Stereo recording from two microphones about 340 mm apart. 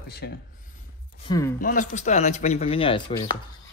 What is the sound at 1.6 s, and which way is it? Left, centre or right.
Speech, left.